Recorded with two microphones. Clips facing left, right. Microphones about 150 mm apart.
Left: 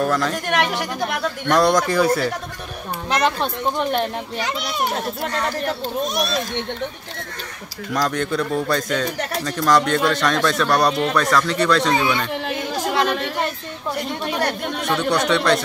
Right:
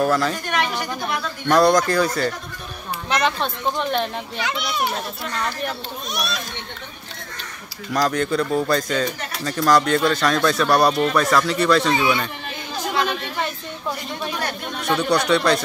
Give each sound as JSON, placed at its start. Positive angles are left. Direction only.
{"t": 0.0, "sound": "speech", "side_deg": -5}
{"t": 0.5, "sound": "a woman's voice", "side_deg": 70}
{"t": 1.5, "sound": "speech", "side_deg": 0}
{"t": 3.3, "sound": "speech", "side_deg": 10}
{"t": 4.4, "sound": "a child's voice", "side_deg": 40}
{"t": 7.9, "sound": "speech", "side_deg": 0}
{"t": 12.4, "sound": "chatter", "side_deg": 65}
{"t": 13.9, "sound": "speech", "side_deg": 65}
{"t": 14.9, "sound": "speech", "side_deg": 0}